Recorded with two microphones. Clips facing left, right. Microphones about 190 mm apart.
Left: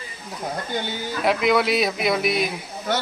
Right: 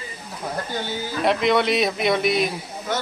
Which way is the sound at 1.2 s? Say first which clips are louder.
Even; centre (ahead or behind).